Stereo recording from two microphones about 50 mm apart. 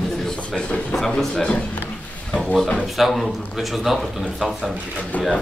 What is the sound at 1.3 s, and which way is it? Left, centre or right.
Speech, centre.